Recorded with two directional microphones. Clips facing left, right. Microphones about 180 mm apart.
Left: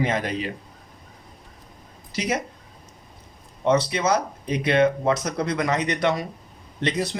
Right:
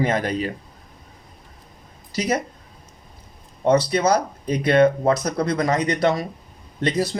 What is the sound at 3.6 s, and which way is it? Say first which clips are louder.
Speech: right 3 dB; 35° right (ahead or behind).